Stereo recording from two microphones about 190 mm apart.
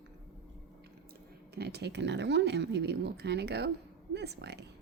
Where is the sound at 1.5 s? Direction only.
60° right (ahead or behind).